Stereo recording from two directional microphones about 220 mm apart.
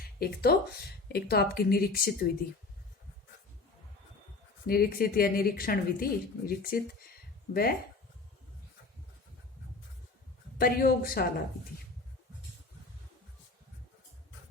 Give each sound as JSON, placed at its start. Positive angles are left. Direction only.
{"t": 0.0, "sound": "a woman's voice", "side_deg": 45}
{"t": 4.6, "sound": "a woman's voice", "side_deg": 45}
{"t": 10.6, "sound": "speech", "side_deg": 40}